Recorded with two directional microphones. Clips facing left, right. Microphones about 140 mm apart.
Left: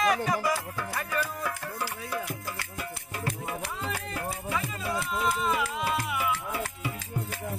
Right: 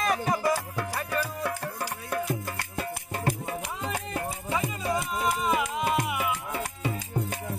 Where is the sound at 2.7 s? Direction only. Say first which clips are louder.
Right 4 dB; 30° right (ahead or behind).